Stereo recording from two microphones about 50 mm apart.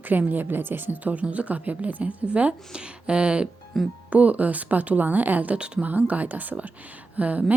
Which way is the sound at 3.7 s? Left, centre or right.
Centre.